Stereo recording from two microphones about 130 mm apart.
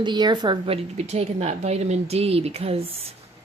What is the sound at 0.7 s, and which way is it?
Speech, 55° right (ahead or behind).